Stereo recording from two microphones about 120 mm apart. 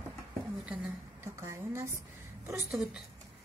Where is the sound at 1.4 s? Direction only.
25° right (ahead or behind).